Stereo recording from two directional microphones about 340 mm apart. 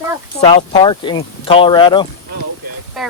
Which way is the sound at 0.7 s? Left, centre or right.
Centre.